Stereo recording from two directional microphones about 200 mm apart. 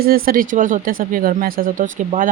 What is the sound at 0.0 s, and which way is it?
Speech, 50° right (ahead or behind).